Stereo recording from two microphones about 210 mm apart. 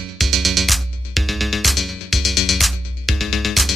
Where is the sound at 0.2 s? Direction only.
Centre (ahead or behind).